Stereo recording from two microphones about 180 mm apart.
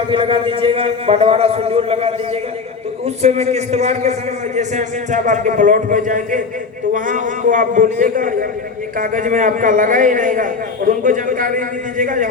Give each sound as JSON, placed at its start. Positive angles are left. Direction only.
{"t": 0.1, "sound": "a man's voice", "side_deg": -30}
{"t": 3.2, "sound": "a man's voice", "side_deg": -35}